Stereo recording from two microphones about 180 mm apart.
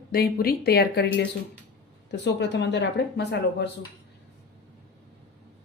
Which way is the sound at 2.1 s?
70° left (ahead or behind).